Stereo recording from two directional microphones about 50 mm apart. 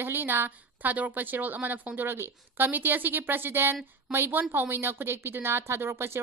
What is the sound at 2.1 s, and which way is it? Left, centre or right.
Speech, right.